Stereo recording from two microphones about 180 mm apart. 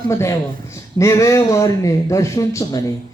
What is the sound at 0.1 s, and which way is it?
A man's voice, 15° left (ahead or behind).